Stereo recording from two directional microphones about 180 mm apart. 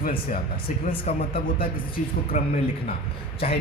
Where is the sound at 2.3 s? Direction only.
40° left (ahead or behind).